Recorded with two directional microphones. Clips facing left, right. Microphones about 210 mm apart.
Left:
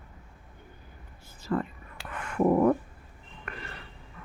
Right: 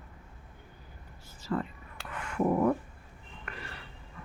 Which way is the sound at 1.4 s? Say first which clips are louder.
Left 3 dB; 55° left (ahead or behind).